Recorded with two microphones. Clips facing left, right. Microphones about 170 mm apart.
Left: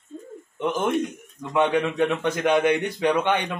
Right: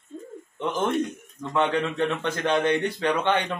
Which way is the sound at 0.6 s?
15° left (ahead or behind).